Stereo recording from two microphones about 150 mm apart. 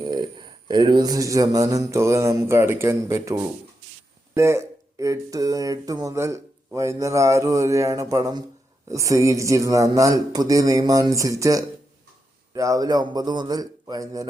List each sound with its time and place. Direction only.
0.0 s speech: 30° right (ahead or behind)